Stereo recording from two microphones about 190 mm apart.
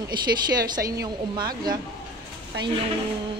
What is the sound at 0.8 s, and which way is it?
Speech, 20° right (ahead or behind).